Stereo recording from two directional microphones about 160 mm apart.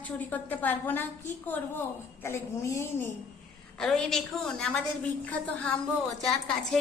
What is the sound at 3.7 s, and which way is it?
A woman's voice, 5° left (ahead or behind).